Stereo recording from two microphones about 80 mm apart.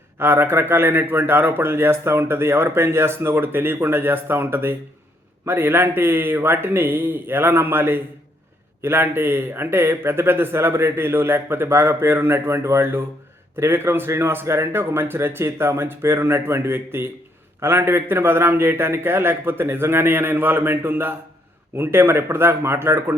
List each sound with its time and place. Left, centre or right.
0.2 s a man's voice: right